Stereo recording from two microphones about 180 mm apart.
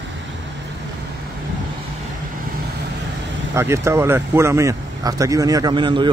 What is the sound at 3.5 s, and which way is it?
Speech, 15° right (ahead or behind).